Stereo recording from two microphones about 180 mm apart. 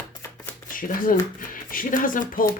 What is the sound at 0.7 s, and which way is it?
Speech, 50° left (ahead or behind).